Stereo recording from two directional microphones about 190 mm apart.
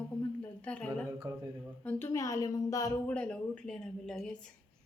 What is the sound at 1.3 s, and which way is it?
Speech, 20° right (ahead or behind).